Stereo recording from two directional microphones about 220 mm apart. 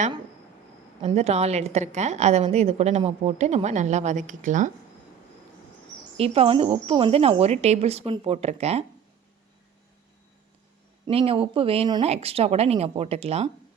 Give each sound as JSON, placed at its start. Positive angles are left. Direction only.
{"t": 1.0, "sound": "a woman's voice", "side_deg": -30}
{"t": 6.1, "sound": "speech", "side_deg": -25}
{"t": 11.0, "sound": "speech", "side_deg": -25}